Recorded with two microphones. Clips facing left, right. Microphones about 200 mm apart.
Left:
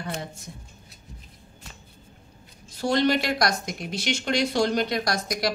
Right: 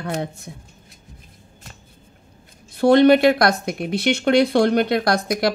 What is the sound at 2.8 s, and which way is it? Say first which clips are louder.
Speech: right 10 dB; 60° right (ahead or behind).